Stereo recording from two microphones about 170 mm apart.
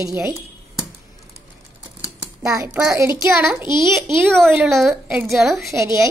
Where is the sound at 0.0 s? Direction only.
15° right (ahead or behind).